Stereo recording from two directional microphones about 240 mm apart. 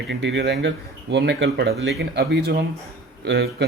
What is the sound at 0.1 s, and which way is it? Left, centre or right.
Speech, right.